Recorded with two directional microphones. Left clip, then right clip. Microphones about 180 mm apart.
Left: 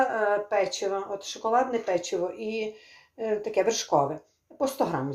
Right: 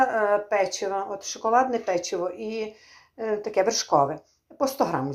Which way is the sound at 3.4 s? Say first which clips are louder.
Right 3 dB; 5° right (ahead or behind).